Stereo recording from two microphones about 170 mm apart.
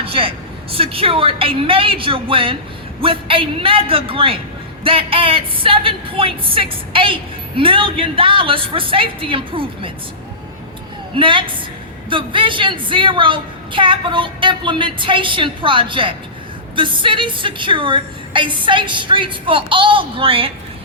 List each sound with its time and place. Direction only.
0.0 s a woman's voice: 35° right (ahead or behind)
11.1 s a woman's voice: 30° right (ahead or behind)